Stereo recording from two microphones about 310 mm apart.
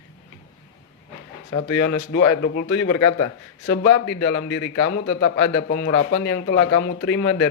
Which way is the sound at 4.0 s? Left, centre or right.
Left.